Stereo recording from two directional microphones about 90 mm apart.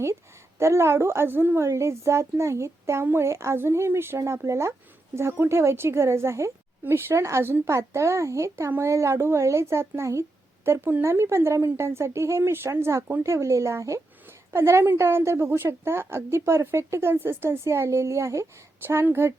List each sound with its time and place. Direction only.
0.6 s a woman's voice: 30° right (ahead or behind)